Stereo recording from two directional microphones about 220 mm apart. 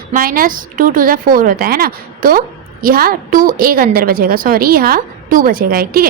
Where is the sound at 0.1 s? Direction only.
40° right (ahead or behind).